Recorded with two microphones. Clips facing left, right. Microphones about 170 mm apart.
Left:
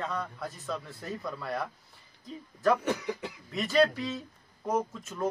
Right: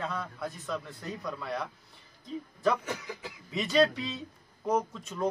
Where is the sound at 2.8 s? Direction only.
70° left (ahead or behind).